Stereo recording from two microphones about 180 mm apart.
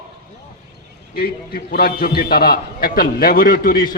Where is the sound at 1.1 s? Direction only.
55° left (ahead or behind).